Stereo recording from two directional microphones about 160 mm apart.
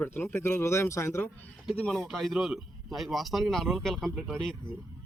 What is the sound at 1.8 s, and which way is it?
A man's voice, 5° left (ahead or behind).